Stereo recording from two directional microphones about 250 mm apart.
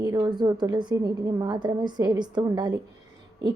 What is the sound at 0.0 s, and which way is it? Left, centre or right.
A woman's voice, centre.